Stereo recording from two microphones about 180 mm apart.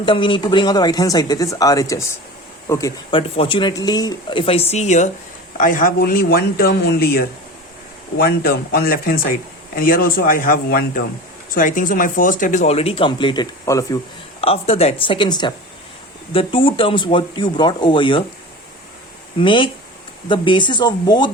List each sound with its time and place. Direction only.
0.0 s speech: 25° left (ahead or behind)
3.1 s speech: 30° left (ahead or behind)
5.5 s speech: 50° left (ahead or behind); by 14.0 s 20° left (ahead or behind)
14.4 s speech: 35° left (ahead or behind)
19.4 s speech: 30° left (ahead or behind)